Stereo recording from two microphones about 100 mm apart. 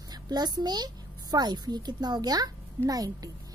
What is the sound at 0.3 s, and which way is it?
A woman's voice, 45° right (ahead or behind).